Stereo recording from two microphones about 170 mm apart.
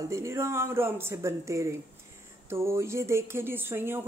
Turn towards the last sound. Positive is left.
turn(degrees=-15)  # may be behind; listen again after turning